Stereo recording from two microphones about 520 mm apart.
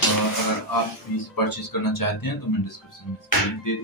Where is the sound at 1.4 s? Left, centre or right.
Left.